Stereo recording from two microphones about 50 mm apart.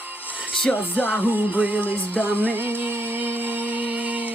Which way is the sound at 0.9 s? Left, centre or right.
Left.